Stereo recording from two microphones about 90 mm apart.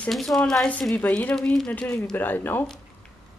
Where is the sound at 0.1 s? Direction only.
Centre (ahead or behind).